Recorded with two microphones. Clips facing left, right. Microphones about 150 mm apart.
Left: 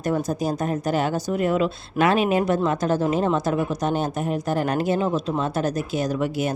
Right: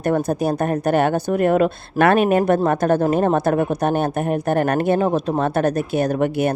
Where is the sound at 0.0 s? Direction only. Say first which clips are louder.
Right 4 dB; 60° right (ahead or behind).